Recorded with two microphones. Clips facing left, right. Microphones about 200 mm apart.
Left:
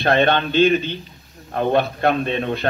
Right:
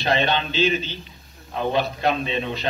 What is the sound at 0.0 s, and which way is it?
A man's voice, 55° left (ahead or behind).